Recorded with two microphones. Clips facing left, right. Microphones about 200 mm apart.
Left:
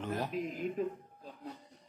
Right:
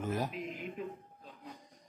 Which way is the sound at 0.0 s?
10° right (ahead or behind).